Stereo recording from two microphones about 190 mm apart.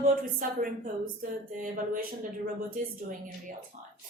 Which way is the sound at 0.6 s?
45° right (ahead or behind).